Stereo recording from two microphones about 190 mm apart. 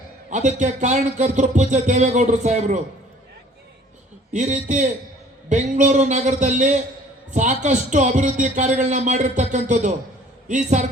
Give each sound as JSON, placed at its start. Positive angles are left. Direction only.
{"t": 0.3, "sound": "a man's voice", "side_deg": -40}
{"t": 4.3, "sound": "speech", "side_deg": -40}